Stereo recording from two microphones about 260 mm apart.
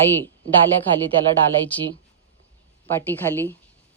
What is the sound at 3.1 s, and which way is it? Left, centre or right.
Speech, centre.